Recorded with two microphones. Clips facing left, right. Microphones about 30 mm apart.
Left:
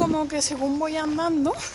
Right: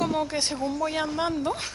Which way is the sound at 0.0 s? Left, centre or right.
Right.